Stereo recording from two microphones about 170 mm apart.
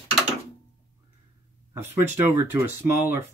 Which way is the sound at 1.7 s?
15° right (ahead or behind).